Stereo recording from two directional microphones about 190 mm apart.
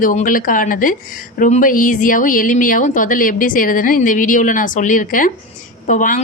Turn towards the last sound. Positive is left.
turn(degrees=40)  # may be behind; listen again after turning